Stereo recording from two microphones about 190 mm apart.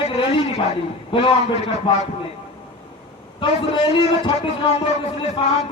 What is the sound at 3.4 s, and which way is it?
A man's voice, 25° left (ahead or behind).